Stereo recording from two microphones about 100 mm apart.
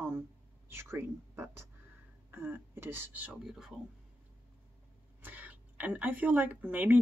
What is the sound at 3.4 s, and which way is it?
Speech, 5° right (ahead or behind).